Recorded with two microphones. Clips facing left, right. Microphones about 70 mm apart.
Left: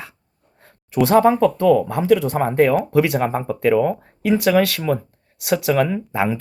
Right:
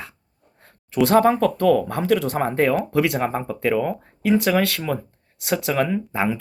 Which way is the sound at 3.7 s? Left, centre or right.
Left.